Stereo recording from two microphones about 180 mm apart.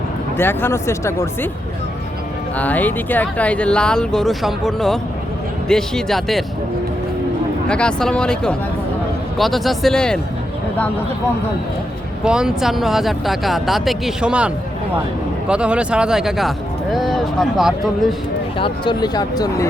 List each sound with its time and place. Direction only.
0.3 s speech: 10° left (ahead or behind)
2.6 s speech: 10° left (ahead or behind)
7.7 s speech: 5° left (ahead or behind)
12.2 s speech: 5° right (ahead or behind)
18.5 s speech: 30° left (ahead or behind)